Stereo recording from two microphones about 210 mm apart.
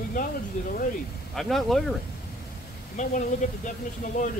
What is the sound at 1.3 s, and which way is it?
Speech, centre (ahead or behind).